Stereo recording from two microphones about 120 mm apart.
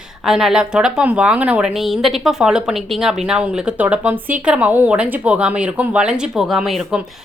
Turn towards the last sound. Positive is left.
turn(degrees=-5)  # may be behind; listen again after turning